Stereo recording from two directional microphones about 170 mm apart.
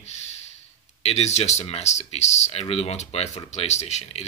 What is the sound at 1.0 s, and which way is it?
Speech, 40° left (ahead or behind).